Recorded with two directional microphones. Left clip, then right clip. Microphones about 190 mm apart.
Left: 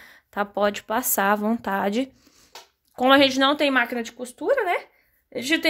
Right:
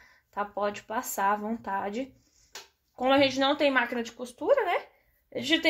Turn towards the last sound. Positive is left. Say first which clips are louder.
# left 3 dB
turn(degrees=40)  # may be behind; listen again after turning